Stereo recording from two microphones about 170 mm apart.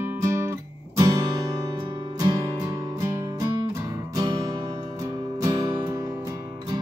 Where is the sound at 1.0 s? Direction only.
20° right (ahead or behind).